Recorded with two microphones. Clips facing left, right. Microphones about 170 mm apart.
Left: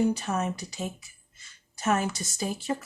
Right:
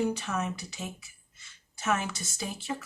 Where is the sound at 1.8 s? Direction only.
40° left (ahead or behind).